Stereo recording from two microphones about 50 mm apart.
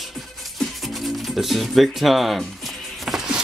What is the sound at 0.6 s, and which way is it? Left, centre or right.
Music, centre.